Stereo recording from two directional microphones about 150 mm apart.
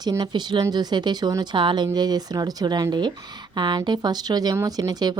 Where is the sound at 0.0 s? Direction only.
30° right (ahead or behind).